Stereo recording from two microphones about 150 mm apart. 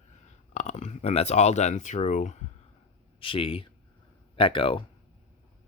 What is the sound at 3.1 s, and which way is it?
Speech, 35° left (ahead or behind).